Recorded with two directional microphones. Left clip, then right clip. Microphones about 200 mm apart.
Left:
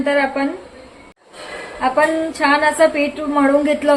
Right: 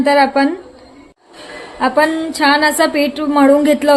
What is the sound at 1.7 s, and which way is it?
A woman's voice, 55° right (ahead or behind).